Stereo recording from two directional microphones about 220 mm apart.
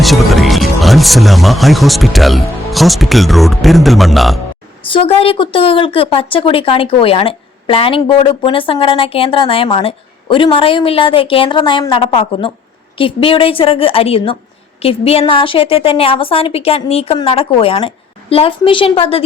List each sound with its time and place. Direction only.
0.0 s a man's voice: centre (ahead or behind)
4.9 s a woman's voice: 25° left (ahead or behind)